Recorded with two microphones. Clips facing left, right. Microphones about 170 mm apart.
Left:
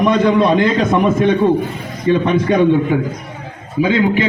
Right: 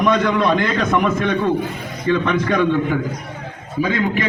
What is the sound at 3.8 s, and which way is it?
Speech, 25° left (ahead or behind).